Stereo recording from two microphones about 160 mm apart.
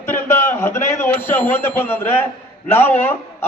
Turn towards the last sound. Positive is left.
turn(degrees=15)  # may be behind; listen again after turning